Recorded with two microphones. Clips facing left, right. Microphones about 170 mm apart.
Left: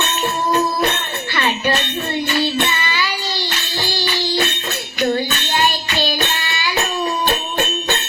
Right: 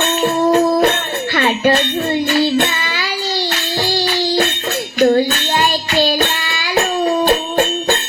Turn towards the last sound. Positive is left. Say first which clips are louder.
# right 6 dB
turn(degrees=-50)  # may be behind; listen again after turning